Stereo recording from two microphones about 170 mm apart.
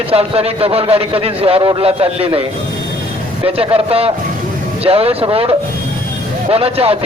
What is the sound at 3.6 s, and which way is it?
A man's voice, 35° right (ahead or behind).